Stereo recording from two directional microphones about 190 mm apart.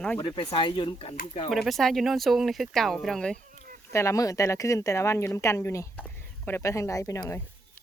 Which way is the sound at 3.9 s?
15° left (ahead or behind).